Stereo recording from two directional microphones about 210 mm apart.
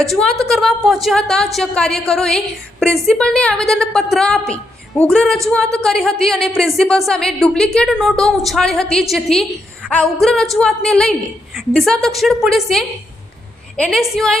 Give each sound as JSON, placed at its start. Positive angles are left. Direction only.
{"t": 0.0, "sound": "a woman's voice", "side_deg": 0}